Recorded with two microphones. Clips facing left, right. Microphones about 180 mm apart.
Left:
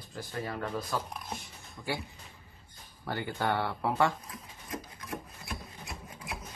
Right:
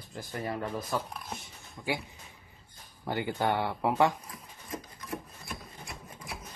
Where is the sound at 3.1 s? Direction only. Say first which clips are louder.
Right 2 dB; 15° right (ahead or behind).